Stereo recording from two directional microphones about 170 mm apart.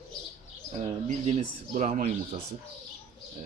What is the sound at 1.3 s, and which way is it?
Speech, 45° right (ahead or behind).